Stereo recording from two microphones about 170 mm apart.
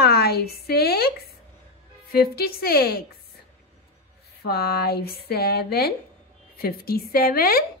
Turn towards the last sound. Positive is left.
turn(degrees=60)  # may be behind; listen again after turning